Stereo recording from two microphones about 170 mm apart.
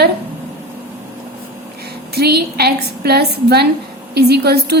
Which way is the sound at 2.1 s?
70° right (ahead or behind).